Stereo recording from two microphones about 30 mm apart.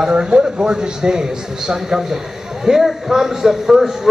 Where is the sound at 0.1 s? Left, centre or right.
Right.